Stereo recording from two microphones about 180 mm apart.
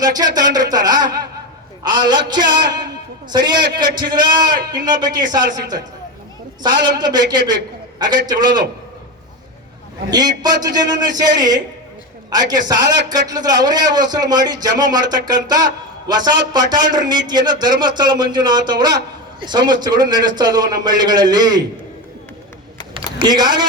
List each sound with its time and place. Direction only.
0.3 s a man's voice: 20° right (ahead or behind)
6.6 s a man's voice: 25° right (ahead or behind)
10.1 s a man's voice: 20° right (ahead or behind)
23.0 s speech: 25° right (ahead or behind)